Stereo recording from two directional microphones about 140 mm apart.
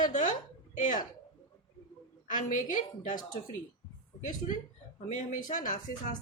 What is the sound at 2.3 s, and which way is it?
A woman's voice, 65° left (ahead or behind).